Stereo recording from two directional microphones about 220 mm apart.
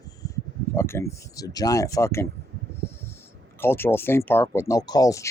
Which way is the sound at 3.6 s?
10° left (ahead or behind).